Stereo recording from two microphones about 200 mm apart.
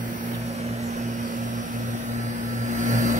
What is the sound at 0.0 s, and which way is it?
Vehicle, 35° right (ahead or behind).